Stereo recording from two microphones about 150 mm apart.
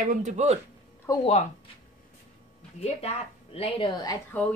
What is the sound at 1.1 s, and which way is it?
Speech, 25° left (ahead or behind).